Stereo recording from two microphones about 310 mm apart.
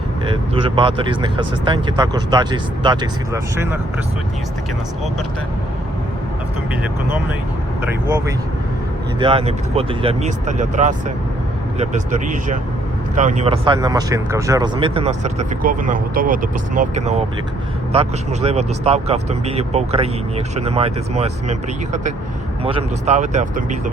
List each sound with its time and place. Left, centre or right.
0.3 s speech: centre
7.8 s speech: centre
22.6 s speech: centre